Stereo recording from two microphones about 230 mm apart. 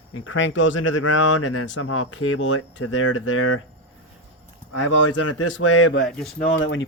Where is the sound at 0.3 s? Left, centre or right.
Left.